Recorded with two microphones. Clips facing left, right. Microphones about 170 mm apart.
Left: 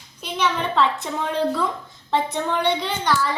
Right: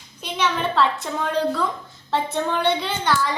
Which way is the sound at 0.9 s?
20° left (ahead or behind).